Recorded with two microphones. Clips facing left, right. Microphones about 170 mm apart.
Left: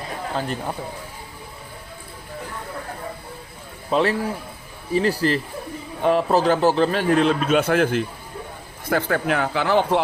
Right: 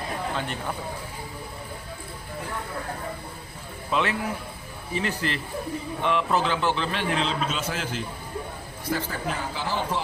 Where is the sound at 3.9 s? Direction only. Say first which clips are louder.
Left 6 dB; 40° left (ahead or behind).